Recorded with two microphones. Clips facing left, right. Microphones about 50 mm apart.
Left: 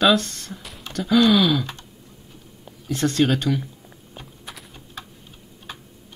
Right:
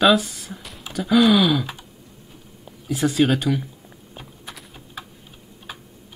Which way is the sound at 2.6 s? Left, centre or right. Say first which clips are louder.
Right 1 dB; centre.